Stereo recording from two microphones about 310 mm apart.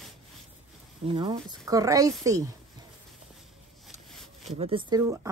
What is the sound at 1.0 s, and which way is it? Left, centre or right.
Speech, centre.